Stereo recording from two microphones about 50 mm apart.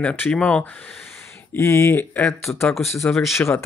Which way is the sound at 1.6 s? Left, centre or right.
Left.